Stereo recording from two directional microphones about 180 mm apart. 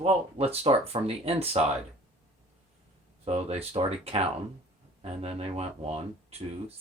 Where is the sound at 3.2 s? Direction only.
35° right (ahead or behind).